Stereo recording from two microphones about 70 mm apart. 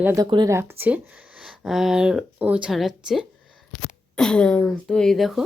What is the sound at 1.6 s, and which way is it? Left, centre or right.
Speech, centre.